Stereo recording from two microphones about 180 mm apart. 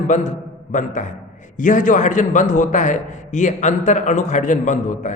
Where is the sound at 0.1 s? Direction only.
45° left (ahead or behind).